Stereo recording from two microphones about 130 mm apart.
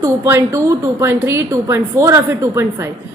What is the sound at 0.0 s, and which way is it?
A woman's voice, 20° right (ahead or behind).